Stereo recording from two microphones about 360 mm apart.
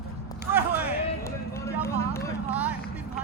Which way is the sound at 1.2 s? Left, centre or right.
Centre.